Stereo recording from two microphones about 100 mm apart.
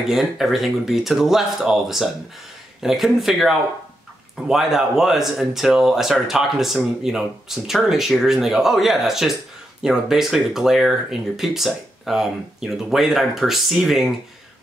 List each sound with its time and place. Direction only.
0.0 s speech: 5° right (ahead or behind)